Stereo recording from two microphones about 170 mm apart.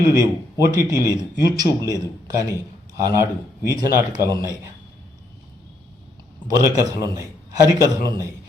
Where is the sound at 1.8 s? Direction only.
20° left (ahead or behind).